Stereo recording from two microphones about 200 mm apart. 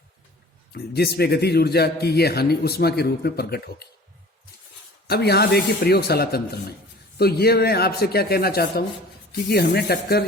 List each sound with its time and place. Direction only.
0.7 s a man's voice: 55° left (ahead or behind)
5.0 s a man's voice: 55° left (ahead or behind)